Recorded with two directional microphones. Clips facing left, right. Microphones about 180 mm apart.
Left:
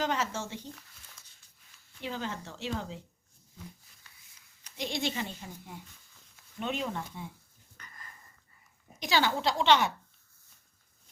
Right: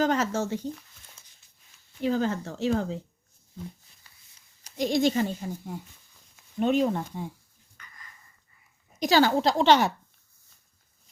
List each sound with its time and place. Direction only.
0.0 s speech: 45° right (ahead or behind)
2.0 s speech: 40° right (ahead or behind)
4.6 s speech: 40° right (ahead or behind)
7.8 s a sound: 45° left (ahead or behind)
9.0 s speech: 40° right (ahead or behind)